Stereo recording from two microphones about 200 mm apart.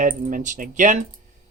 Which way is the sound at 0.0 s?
40° right (ahead or behind).